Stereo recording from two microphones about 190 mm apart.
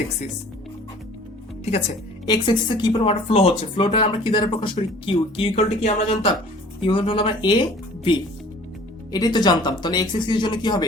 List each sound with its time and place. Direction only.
1.6 s speech: 35° left (ahead or behind)
2.2 s speech: 20° left (ahead or behind)
9.1 s speech: 20° left (ahead or behind)